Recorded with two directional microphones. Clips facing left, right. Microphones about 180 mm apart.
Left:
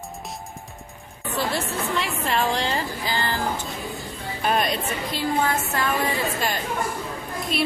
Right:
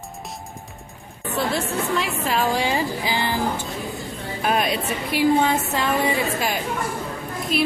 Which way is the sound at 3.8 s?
Centre (ahead or behind).